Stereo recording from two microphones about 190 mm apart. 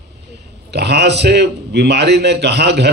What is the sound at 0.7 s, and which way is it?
A man's voice, 60° right (ahead or behind).